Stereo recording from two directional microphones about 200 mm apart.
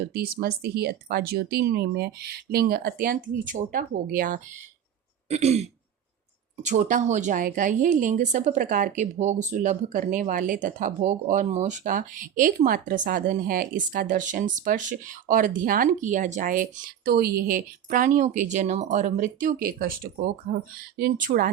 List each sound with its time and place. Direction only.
0.0 s speech: 50° right (ahead or behind)
5.3 s a woman's voice: 30° right (ahead or behind)
17.1 s a woman's voice: 55° right (ahead or behind)
20.9 s speech: 45° right (ahead or behind)